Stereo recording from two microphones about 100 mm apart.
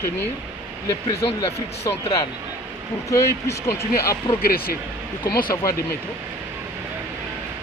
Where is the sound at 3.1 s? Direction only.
30° left (ahead or behind).